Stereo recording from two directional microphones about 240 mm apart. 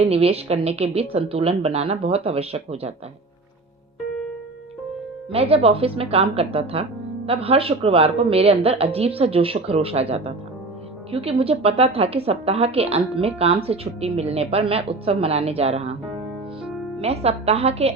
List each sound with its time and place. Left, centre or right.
0.0 s a woman's voice: right
5.3 s a woman's voice: right
17.0 s a woman's voice: right